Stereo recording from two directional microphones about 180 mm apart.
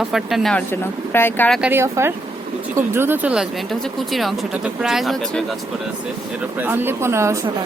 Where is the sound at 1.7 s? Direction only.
15° right (ahead or behind).